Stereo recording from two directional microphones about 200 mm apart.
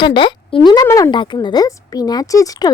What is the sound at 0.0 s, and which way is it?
Speech, 25° left (ahead or behind).